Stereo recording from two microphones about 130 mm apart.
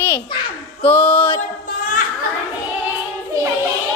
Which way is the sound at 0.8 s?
45° left (ahead or behind).